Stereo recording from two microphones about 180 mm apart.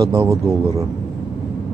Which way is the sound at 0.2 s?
15° right (ahead or behind).